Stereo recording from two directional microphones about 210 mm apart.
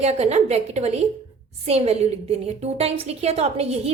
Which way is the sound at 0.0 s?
30° right (ahead or behind).